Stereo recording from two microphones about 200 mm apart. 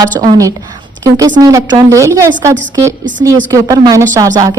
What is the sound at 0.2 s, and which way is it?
A woman's voice, 15° right (ahead or behind).